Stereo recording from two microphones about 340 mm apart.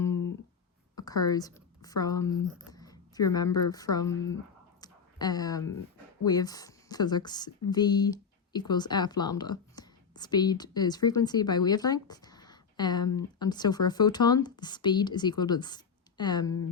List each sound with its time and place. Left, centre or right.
0.1 s guitar: left
0.9 s speech: centre
4.8 s a sound: centre
6.2 s a woman's voice: centre